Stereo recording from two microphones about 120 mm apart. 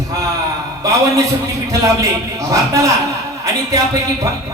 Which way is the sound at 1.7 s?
30° right (ahead or behind).